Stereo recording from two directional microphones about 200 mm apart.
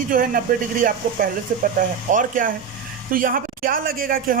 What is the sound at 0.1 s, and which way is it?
A man's voice, 45° right (ahead or behind).